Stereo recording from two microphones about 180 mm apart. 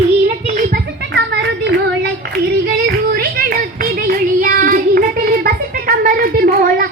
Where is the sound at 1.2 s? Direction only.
80° right.